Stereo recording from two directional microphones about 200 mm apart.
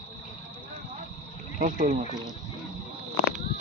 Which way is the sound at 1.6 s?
40° right (ahead or behind).